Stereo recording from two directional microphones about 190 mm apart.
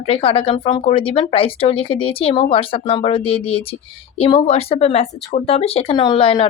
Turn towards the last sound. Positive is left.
turn(degrees=25)  # may be behind; listen again after turning